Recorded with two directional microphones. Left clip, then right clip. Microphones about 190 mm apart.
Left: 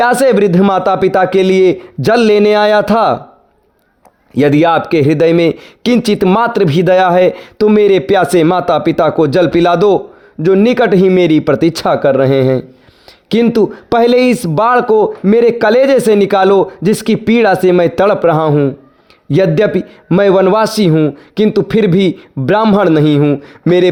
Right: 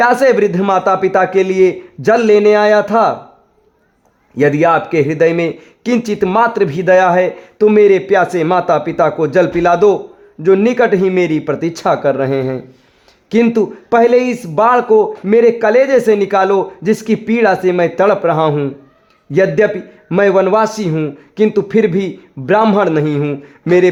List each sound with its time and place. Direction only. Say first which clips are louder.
0.0 s speech: left 1 dB; 35° left (ahead or behind)
4.4 s speech: left 2 dB; 40° left (ahead or behind)
18.4 s speech: left 3 dB; 25° left (ahead or behind)
19.3 s speech: left 1 dB; 40° left (ahead or behind)